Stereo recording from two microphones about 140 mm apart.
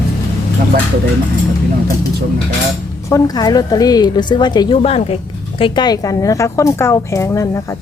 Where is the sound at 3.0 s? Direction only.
25° left (ahead or behind).